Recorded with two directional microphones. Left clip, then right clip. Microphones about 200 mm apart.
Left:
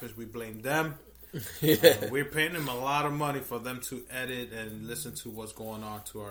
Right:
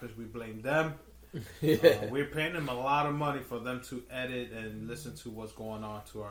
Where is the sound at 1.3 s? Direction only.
15° left (ahead or behind).